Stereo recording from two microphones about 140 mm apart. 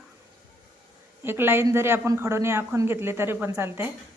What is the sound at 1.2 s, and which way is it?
Speech, 15° right (ahead or behind).